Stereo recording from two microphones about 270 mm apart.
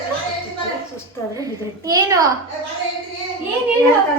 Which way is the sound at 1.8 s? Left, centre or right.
Centre.